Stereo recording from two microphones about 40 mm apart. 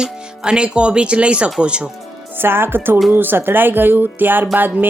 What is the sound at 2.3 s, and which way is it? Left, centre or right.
Speech, right.